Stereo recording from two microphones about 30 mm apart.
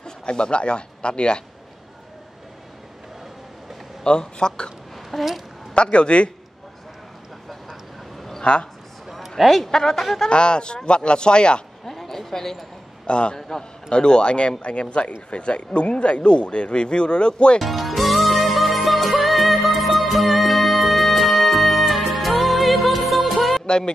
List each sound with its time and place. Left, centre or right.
0.0 s speech: left
4.0 s a man's voice: left
5.1 s a woman's voice: centre
5.8 s speech: left
8.4 s speech: left
9.7 s a woman's voice: centre
10.3 s speech: left
11.8 s a sound: centre
13.0 s a man's voice: left
13.5 s a man's voice: centre
13.9 s speech: left
17.6 s music: centre